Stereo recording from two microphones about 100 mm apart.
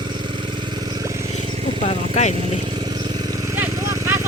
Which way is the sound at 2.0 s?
85° right.